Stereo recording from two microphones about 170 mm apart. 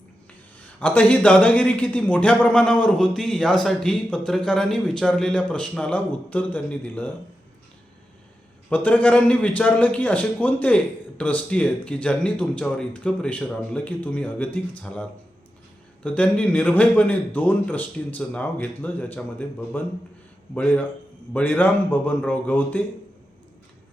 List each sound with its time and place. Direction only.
0.8 s a man's voice: 10° left (ahead or behind)
8.7 s a man's voice: 10° left (ahead or behind)
16.0 s a man's voice: 10° left (ahead or behind)